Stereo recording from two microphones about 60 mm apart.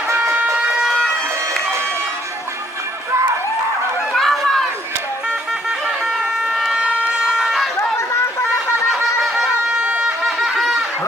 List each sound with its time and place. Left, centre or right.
0.8 s livestock: centre
4.1 s run: centre
5.6 s a sound: centre
9.2 s shofar: centre
9.7 s wind instrument: centre
10.2 s a sound: centre